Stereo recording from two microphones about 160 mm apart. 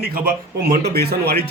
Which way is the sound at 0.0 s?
70° right (ahead or behind).